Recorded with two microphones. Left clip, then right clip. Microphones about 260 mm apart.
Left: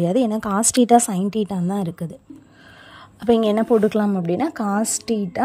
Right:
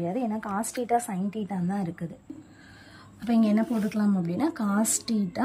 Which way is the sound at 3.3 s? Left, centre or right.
Centre.